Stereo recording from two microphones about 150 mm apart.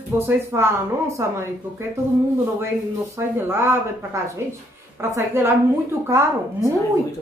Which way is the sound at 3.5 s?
15° right (ahead or behind).